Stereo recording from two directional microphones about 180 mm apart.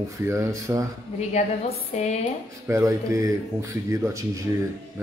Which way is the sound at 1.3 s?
35° left (ahead or behind).